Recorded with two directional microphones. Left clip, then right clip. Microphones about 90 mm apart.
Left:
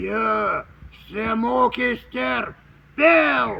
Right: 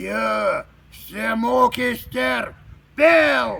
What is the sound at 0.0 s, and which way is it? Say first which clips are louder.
A man's voice: even; 50° right (ahead or behind).